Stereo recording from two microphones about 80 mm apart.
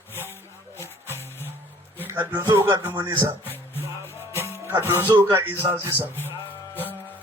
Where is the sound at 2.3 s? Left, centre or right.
Right.